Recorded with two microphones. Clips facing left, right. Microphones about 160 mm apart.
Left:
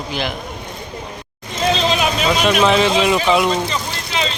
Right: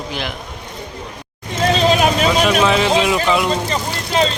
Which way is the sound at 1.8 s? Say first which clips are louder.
Right 4 dB; 45° right (ahead or behind).